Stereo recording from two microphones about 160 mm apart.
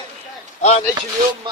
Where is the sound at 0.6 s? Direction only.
40° left (ahead or behind).